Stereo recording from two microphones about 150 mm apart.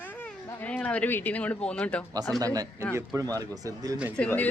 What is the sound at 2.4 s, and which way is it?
Speech, 25° right (ahead or behind).